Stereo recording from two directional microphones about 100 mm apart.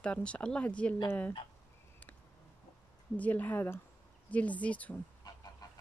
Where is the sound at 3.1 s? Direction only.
15° left (ahead or behind).